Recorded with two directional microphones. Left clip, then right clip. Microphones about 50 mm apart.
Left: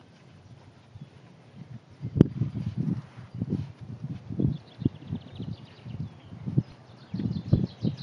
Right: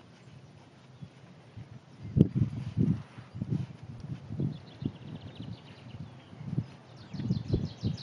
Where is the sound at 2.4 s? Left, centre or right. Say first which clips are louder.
Right 2 dB; centre.